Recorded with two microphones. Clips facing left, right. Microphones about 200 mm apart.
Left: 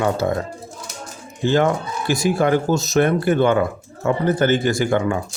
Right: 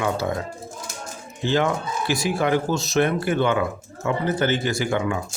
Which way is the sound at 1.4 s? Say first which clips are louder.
Left 4 dB; 50° left (ahead or behind).